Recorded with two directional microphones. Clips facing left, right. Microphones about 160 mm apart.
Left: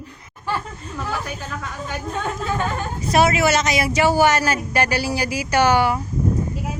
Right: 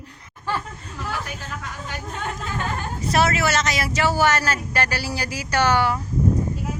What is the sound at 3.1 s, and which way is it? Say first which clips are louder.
Speech: left 4 dB; 15° left (ahead or behind).